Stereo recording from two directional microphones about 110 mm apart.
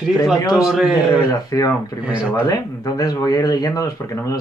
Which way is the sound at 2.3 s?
30° left (ahead or behind).